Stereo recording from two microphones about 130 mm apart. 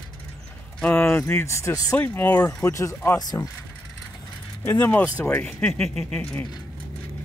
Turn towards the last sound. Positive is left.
turn(degrees=5)  # may be behind; listen again after turning